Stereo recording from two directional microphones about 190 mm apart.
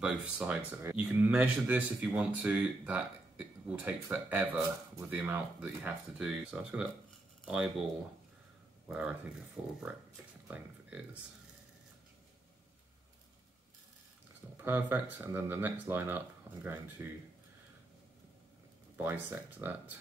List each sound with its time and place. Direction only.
0.0 s speech: 5° right (ahead or behind)
8.8 s speech: 5° right (ahead or behind)
14.6 s speech: 10° right (ahead or behind)
18.9 s speech: 10° right (ahead or behind)